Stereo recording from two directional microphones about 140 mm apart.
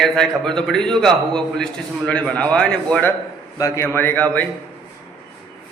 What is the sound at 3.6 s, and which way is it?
Speech, 15° left (ahead or behind).